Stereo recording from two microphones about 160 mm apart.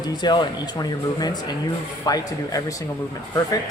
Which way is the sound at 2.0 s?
25° left (ahead or behind).